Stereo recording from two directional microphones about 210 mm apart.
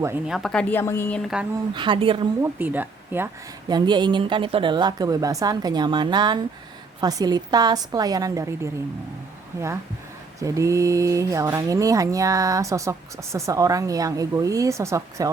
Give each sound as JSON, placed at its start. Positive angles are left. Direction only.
{"t": 0.0, "sound": "speech", "side_deg": -10}
{"t": 0.3, "sound": "a woman's voice", "side_deg": 0}
{"t": 1.7, "sound": "speech", "side_deg": -20}
{"t": 2.4, "sound": "speech", "side_deg": -10}
{"t": 3.7, "sound": "speech", "side_deg": -20}
{"t": 10.4, "sound": "speech", "side_deg": -15}